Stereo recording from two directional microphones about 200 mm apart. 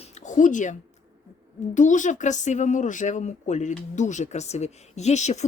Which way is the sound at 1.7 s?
40° left (ahead or behind).